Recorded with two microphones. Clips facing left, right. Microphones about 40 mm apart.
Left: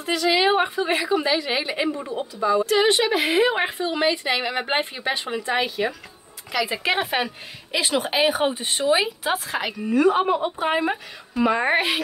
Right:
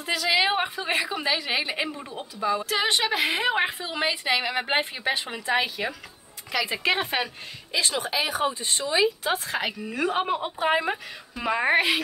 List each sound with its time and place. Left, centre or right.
0.0 s a woman's voice: centre
8.0 s speech: left
9.2 s a woman's voice: centre